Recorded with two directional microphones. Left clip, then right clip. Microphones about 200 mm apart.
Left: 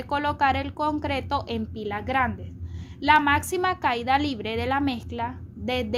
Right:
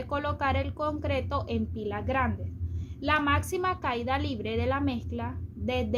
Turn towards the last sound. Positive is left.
turn(degrees=45)  # may be behind; listen again after turning